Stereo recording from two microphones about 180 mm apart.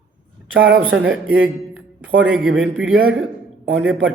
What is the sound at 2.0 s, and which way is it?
Speech, 90° right.